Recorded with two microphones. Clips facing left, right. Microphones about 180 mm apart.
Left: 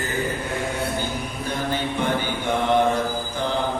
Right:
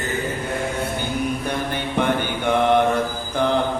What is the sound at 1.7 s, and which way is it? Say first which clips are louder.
Mantra: right 2 dB; 60° right (ahead or behind).